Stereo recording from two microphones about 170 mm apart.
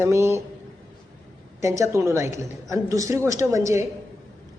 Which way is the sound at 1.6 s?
15° right (ahead or behind).